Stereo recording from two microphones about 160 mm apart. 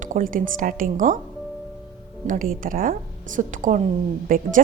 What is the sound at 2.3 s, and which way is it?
A woman's voice, 60° right (ahead or behind).